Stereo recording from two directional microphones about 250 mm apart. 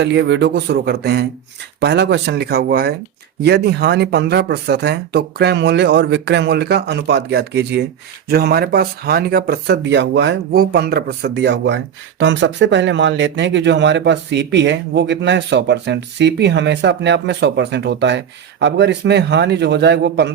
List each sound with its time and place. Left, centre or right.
0.0 s speech: right